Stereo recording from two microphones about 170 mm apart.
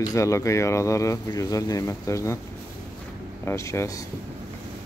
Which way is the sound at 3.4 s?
15° left (ahead or behind).